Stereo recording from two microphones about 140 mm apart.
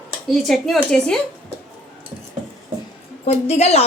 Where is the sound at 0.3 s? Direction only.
Centre (ahead or behind).